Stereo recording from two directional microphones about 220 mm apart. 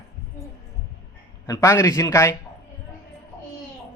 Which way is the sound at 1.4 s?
15° left (ahead or behind).